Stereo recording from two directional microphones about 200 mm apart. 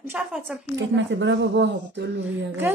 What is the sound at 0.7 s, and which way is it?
Speech, 65° right (ahead or behind).